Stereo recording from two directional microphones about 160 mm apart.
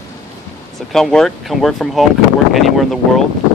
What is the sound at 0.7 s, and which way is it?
Speech, centre (ahead or behind).